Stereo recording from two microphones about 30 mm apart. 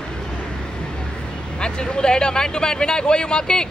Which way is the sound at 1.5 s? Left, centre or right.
Left.